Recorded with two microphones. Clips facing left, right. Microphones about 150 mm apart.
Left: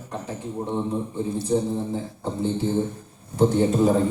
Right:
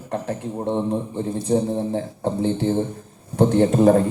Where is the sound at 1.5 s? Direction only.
70° right (ahead or behind).